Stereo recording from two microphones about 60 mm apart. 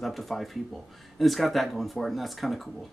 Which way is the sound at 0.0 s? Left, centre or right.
Centre.